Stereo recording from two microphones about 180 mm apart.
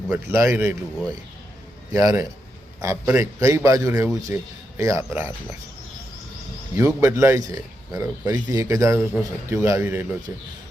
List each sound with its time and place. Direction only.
0.1 s a man's voice: 15° right (ahead or behind)
6.7 s a man's voice: 15° right (ahead or behind)